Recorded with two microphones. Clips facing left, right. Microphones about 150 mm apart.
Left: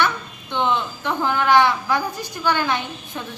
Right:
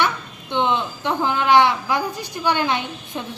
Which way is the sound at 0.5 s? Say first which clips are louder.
Right 1 dB; 20° right (ahead or behind).